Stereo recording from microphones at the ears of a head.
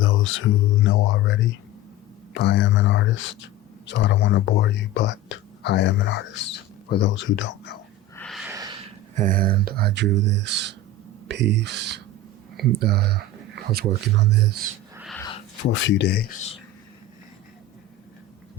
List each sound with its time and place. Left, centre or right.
0.0 s speech: left
9.1 s speech: right
15.2 s speech: left